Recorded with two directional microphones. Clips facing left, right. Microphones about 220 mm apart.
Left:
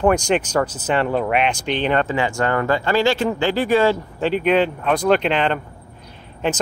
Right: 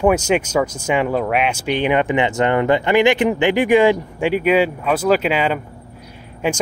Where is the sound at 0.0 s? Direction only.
10° right (ahead or behind).